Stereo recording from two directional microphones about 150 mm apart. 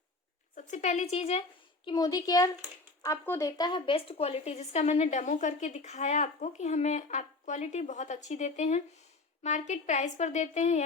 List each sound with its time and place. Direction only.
0.5 s speech: 50° left (ahead or behind)
1.9 s speech: 25° left (ahead or behind)
3.7 s speech: 35° left (ahead or behind); by 10.8 s 50° left (ahead or behind)